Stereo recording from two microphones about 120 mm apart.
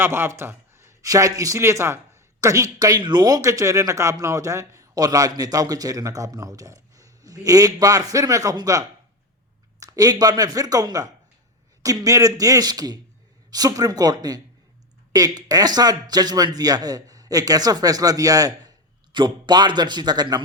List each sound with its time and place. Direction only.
0.0 s speech: 20° right (ahead or behind)
9.8 s a man's voice: 30° right (ahead or behind)